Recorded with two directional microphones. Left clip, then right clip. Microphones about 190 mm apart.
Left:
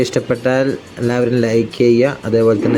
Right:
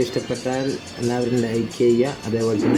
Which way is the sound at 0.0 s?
35° left (ahead or behind).